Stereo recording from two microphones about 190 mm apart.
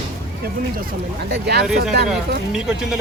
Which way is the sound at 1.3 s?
60° right (ahead or behind).